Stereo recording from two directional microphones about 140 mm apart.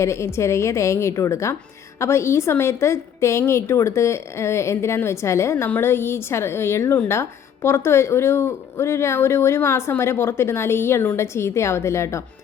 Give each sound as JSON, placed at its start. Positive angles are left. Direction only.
{"t": 0.0, "sound": "a woman's voice", "side_deg": 20}